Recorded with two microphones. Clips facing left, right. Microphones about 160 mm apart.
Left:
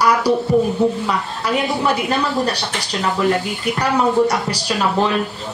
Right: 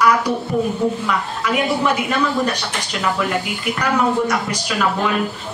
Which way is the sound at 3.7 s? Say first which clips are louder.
Left 2 dB; 35° left (ahead or behind).